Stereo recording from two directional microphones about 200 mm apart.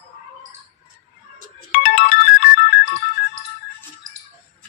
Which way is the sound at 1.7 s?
40° left (ahead or behind).